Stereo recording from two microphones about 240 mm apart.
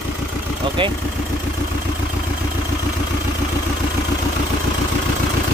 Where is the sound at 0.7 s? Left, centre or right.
Right.